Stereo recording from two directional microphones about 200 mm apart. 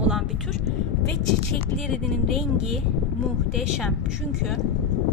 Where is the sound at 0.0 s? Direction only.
Centre (ahead or behind).